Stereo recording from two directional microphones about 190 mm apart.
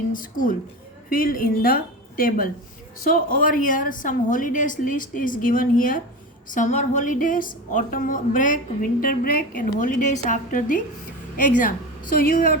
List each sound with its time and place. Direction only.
0.1 s a woman's voice: 45° left (ahead or behind)